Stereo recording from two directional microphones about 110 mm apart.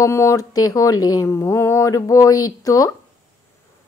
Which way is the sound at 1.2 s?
25° left (ahead or behind).